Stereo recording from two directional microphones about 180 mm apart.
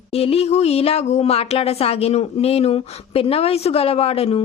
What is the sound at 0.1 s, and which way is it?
Speech, 35° left (ahead or behind).